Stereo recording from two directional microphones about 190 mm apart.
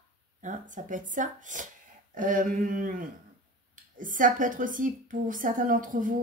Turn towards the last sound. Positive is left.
turn(degrees=-45)  # may be behind; listen again after turning